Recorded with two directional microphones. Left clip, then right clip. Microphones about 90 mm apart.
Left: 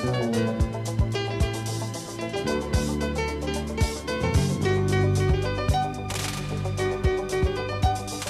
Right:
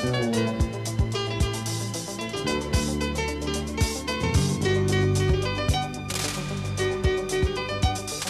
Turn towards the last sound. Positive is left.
turn(degrees=-25)  # may be behind; listen again after turning